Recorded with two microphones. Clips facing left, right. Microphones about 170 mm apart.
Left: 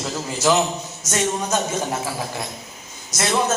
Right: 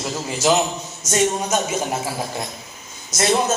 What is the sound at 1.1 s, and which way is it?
Speech, 15° right (ahead or behind).